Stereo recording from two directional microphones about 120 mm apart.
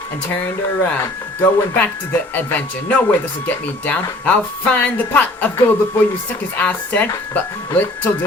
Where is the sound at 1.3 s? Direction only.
15° left (ahead or behind).